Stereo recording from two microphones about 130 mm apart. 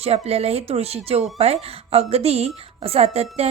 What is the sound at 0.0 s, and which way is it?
A woman's voice, 50° right (ahead or behind).